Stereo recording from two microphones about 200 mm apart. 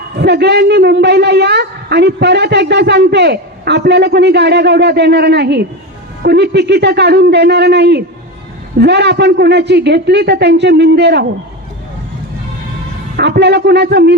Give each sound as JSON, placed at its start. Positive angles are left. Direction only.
{"t": 0.2, "sound": "a woman's voice", "side_deg": -55}
{"t": 13.1, "sound": "a woman's voice", "side_deg": -55}